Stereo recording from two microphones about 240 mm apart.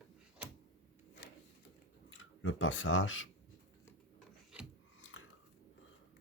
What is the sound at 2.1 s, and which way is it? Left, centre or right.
Speech, left.